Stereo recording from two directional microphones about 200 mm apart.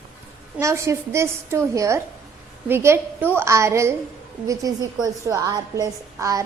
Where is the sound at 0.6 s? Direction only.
15° right (ahead or behind).